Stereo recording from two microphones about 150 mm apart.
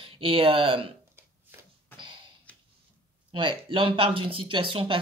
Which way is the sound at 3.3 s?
35° right (ahead or behind).